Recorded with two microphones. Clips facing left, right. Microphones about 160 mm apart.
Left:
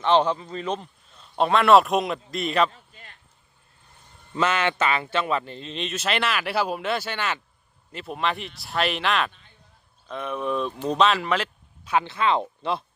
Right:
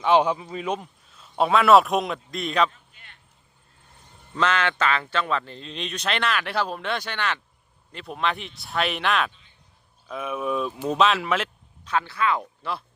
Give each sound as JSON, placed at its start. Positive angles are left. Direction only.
{"t": 0.0, "sound": "speech", "side_deg": -10}
{"t": 2.9, "sound": "a sound", "side_deg": 35}
{"t": 4.4, "sound": "speech", "side_deg": 10}
{"t": 11.9, "sound": "speech", "side_deg": 20}